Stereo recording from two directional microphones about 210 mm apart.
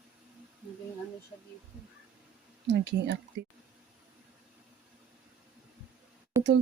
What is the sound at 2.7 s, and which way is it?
Speech, 55° right (ahead or behind).